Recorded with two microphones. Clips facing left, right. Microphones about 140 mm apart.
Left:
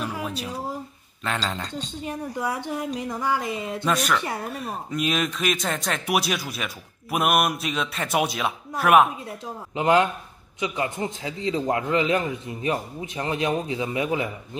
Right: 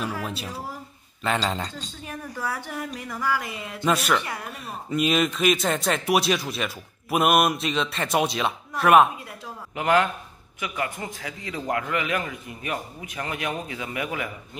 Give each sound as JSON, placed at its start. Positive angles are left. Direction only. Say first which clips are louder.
{"t": 1.2, "sound": "speech", "louder": "right 3 dB", "side_deg": -5}
{"t": 1.8, "sound": "a man's voice", "louder": "left 5 dB", "side_deg": 20}
{"t": 3.8, "sound": "speech", "louder": "right 2 dB", "side_deg": -5}
{"t": 4.3, "sound": "speech", "louder": "left 4 dB", "side_deg": 35}
{"t": 4.6, "sound": "speech", "louder": "right 4 dB", "side_deg": 0}
{"t": 9.8, "sound": "a man's voice", "louder": "left 2 dB", "side_deg": 20}